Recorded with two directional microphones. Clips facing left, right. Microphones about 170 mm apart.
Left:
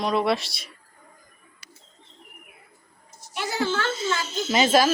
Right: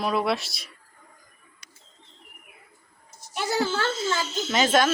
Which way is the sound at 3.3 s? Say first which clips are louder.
Right 1 dB; 40° right (ahead or behind).